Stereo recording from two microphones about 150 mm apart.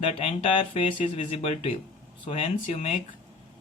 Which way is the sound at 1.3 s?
45° left (ahead or behind).